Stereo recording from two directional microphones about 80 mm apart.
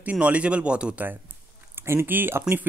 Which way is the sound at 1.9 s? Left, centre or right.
Right.